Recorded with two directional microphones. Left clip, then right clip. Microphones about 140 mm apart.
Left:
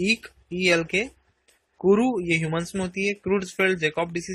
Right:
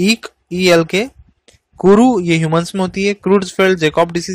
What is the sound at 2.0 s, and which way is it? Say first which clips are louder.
Speech: right 11 dB; 60° right (ahead or behind).